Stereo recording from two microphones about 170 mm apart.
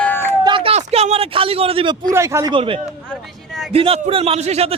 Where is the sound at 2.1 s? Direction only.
15° right (ahead or behind).